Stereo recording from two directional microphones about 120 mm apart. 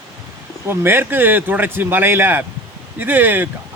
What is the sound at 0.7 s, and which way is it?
Speech, 20° right (ahead or behind).